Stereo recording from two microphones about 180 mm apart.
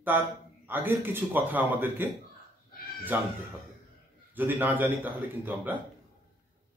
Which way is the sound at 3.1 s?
10° right (ahead or behind).